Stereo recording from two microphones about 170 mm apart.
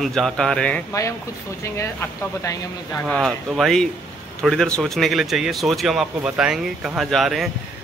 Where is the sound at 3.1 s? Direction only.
Centre (ahead or behind).